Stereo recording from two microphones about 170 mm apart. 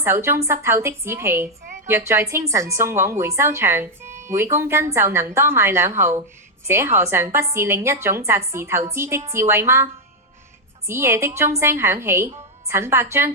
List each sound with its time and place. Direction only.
0.0 s speech: 15° right (ahead or behind)
4.1 s music: 45° right (ahead or behind)
4.5 s speech: 15° right (ahead or behind)